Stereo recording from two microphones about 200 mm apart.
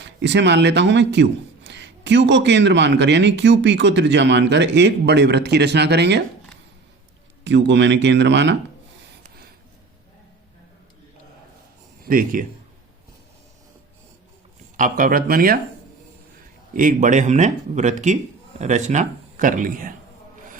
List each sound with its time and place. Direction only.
0.0 s speech: 60° right (ahead or behind)
7.4 s speech: 65° right (ahead or behind)
12.0 s speech: 45° right (ahead or behind)
14.8 s speech: 45° right (ahead or behind)
16.7 s speech: 40° right (ahead or behind)